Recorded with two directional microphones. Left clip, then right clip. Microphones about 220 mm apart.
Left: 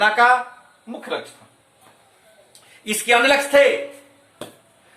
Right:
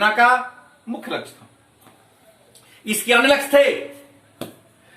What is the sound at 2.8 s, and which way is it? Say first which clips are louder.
Speech: even; 20° left (ahead or behind).